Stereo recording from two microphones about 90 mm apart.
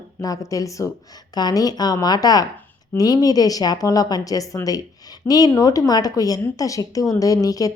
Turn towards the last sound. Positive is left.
turn(degrees=40)  # may be behind; listen again after turning